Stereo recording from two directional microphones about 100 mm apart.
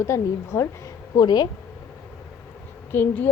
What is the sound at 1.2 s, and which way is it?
Speech, 40° left (ahead or behind).